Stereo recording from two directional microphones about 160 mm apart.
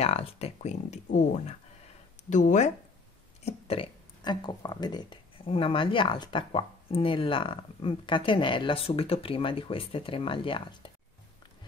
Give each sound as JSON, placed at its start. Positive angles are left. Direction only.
{"t": 0.0, "sound": "speech", "side_deg": 40}
{"t": 3.4, "sound": "speech", "side_deg": 35}